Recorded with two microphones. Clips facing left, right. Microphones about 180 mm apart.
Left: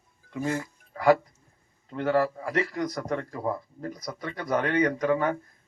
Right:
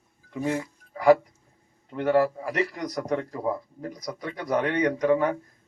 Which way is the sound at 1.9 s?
15° right (ahead or behind).